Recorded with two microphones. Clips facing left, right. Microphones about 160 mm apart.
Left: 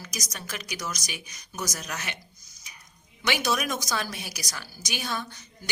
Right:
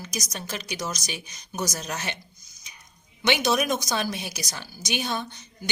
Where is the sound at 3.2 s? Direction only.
20° right (ahead or behind).